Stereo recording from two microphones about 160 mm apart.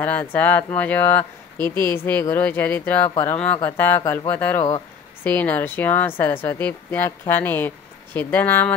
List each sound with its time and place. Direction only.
0.0 s a woman's voice: 10° left (ahead or behind)